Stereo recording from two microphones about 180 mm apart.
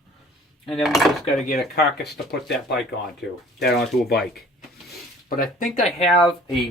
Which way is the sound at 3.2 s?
70° left (ahead or behind).